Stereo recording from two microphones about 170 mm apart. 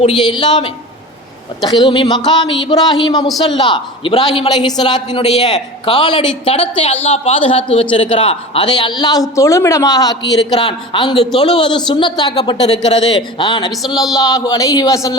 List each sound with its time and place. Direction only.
0.0 s a woman's voice: 30° left (ahead or behind)